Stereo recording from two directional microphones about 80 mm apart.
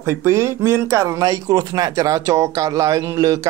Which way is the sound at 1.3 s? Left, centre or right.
Right.